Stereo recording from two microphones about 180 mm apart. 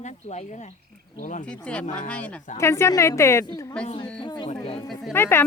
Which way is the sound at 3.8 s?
30° left (ahead or behind).